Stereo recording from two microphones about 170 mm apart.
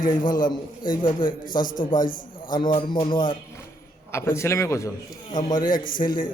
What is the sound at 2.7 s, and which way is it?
Speech, 30° left (ahead or behind).